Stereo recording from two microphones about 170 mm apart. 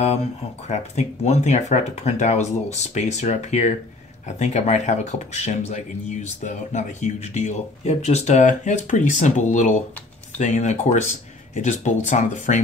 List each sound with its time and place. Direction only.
0.0 s speech: 40° left (ahead or behind)